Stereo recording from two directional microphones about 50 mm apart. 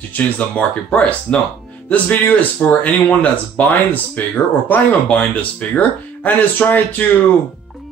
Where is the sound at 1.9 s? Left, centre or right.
Left.